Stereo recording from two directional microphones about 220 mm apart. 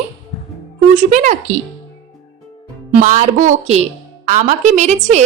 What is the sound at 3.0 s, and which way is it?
A woman's voice, 35° right (ahead or behind).